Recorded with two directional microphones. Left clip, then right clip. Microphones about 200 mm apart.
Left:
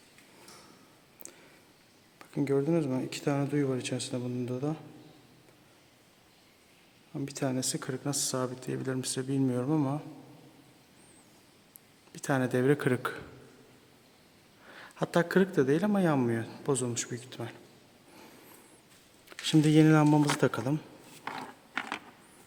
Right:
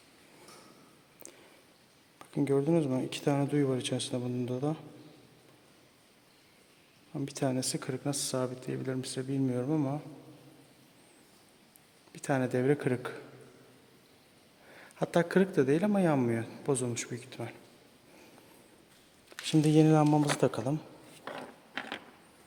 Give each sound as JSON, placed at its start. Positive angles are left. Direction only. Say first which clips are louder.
{"t": 2.1, "sound": "speech", "louder": "even", "side_deg": -5}
{"t": 7.1, "sound": "speech", "louder": "right 1 dB", "side_deg": -5}
{"t": 12.1, "sound": "speech", "louder": "left 1 dB", "side_deg": 5}
{"t": 14.7, "sound": "speech", "louder": "even", "side_deg": 10}
{"t": 19.5, "sound": "speech", "louder": "left 2 dB", "side_deg": 10}